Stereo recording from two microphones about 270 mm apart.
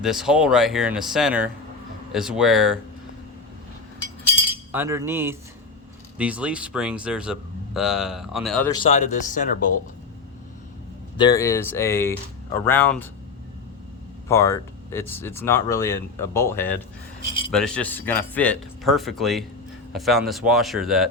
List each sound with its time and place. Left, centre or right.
0.0 s speech: centre
4.7 s cutlery: centre
6.1 s speech: centre
8.7 s speech: left
11.2 s speech: centre
14.3 s speech: centre